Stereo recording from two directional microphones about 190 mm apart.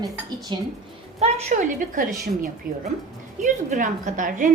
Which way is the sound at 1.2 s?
35° right (ahead or behind).